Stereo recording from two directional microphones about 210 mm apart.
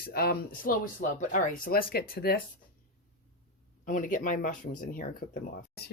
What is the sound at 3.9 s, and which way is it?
Speech, 40° left (ahead or behind).